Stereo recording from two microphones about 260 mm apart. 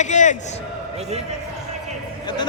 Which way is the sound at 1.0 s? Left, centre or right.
Right.